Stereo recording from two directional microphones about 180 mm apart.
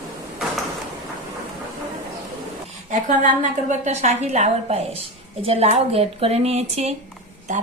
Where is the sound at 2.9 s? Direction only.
45° right (ahead or behind).